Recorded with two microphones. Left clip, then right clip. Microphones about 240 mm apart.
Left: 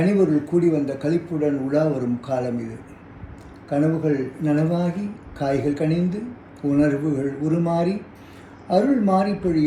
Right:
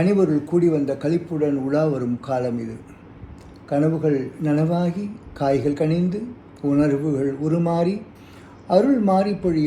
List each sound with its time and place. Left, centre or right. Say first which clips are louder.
0.0 s speech: even; centre